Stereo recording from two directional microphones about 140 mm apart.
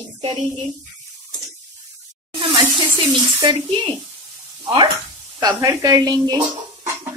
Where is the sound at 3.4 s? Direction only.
35° right (ahead or behind).